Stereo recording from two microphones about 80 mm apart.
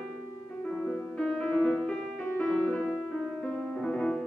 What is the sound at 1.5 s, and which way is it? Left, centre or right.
Music, centre.